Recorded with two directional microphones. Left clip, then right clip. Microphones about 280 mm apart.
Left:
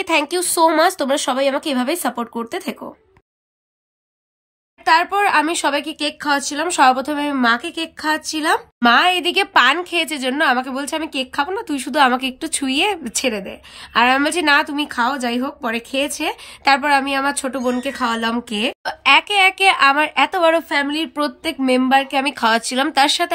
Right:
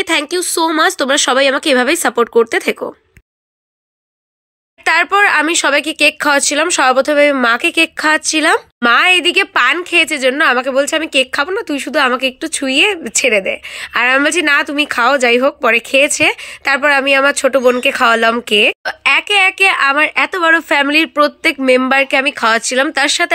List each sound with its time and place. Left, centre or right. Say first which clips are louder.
0.0 s speech: right 3 dB; centre
4.8 s speech: right 4 dB; centre
17.6 s speech: right 8 dB; right
17.9 s speech: right 9 dB; centre